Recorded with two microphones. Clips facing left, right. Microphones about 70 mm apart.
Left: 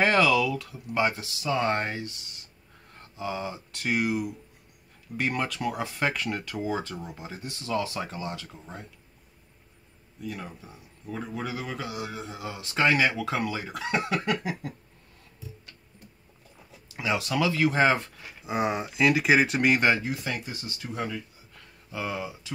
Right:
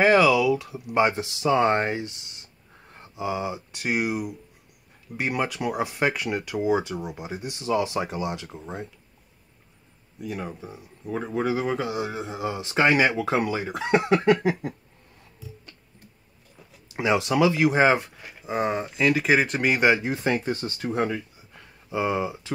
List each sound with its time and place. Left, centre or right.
0.0 s speech: centre
10.2 s speech: right
16.9 s speech: right
18.4 s speech: centre
20.1 s speech: right
20.4 s speech: right
21.5 s a sound: right